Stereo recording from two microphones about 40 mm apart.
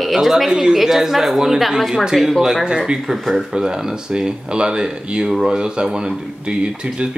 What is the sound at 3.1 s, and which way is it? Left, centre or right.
Speech, centre.